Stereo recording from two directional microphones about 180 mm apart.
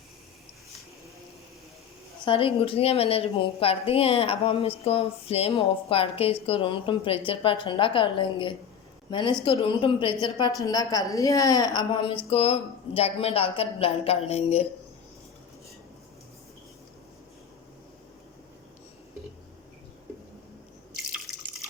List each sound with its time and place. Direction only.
2.2 s a woman's voice: 30° left (ahead or behind)